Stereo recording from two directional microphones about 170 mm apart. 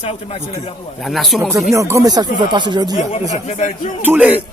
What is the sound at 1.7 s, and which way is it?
Speech, 15° right (ahead or behind).